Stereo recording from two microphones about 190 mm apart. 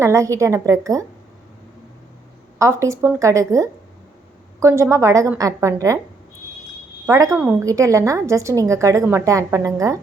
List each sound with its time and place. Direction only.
0.0 s a woman's voice: 15° right (ahead or behind)
2.6 s a woman's voice: 15° right (ahead or behind)
7.1 s a woman's voice: 15° right (ahead or behind)